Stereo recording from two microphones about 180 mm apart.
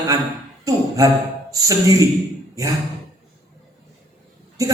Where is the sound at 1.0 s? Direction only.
20° right (ahead or behind).